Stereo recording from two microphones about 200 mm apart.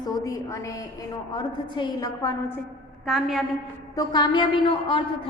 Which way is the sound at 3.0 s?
Centre (ahead or behind).